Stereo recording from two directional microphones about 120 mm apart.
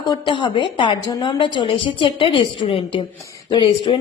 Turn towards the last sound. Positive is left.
turn(degrees=45)  # may be behind; listen again after turning